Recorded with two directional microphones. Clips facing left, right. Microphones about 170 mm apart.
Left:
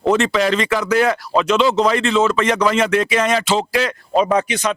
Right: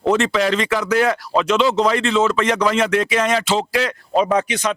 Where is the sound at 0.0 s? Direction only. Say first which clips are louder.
Left 1 dB; 10° left (ahead or behind).